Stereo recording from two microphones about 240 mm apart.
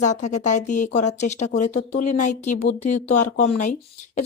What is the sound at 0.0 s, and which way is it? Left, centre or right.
Speech, left.